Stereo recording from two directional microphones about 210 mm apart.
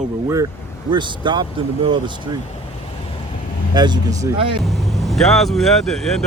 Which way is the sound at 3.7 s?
20° right (ahead or behind).